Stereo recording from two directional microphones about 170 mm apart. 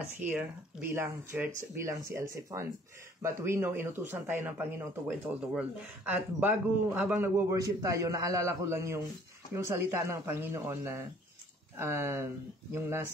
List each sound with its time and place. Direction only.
0.2 s speech: 10° right (ahead or behind)